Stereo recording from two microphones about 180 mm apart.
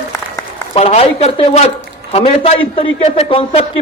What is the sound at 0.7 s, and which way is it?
A man's voice, 35° left (ahead or behind).